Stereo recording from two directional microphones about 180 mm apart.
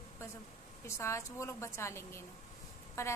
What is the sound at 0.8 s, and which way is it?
A woman's voice, 15° left (ahead or behind).